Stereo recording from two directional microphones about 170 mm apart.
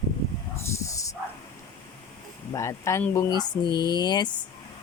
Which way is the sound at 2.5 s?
15° left (ahead or behind).